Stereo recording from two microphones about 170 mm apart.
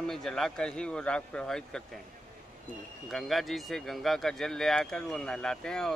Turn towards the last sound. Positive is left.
turn(degrees=5)  # may be behind; listen again after turning